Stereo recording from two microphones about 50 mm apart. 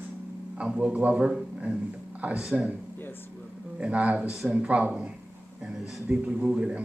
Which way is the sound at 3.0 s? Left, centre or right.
Left.